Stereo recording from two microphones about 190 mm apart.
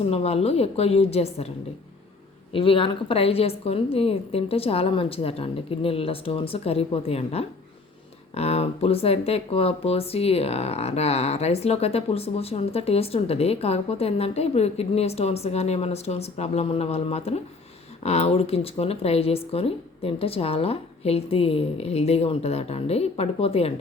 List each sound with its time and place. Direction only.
0.1 s speech: 30° left (ahead or behind)
2.5 s speech: 30° left (ahead or behind)